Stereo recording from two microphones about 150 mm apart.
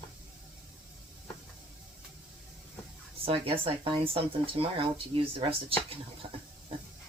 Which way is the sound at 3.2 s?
40° right (ahead or behind).